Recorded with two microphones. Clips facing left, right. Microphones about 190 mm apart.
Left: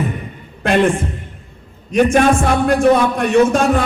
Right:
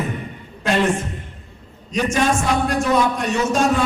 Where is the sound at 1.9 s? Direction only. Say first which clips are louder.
Left 7 dB; 55° left (ahead or behind).